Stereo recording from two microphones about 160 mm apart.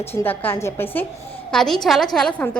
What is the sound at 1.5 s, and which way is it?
Speech, centre (ahead or behind).